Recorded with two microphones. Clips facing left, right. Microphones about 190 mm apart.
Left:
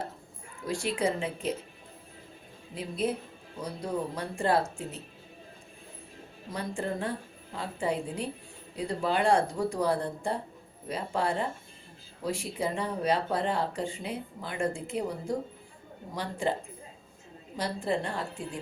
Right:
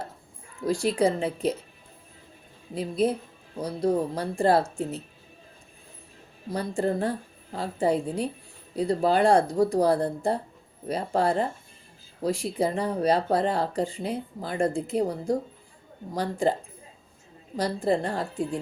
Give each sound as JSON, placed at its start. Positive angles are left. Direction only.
{"t": 0.6, "sound": "speech", "side_deg": -40}
{"t": 2.7, "sound": "speech", "side_deg": -40}
{"t": 6.5, "sound": "speech", "side_deg": -35}
{"t": 17.6, "sound": "speech", "side_deg": -40}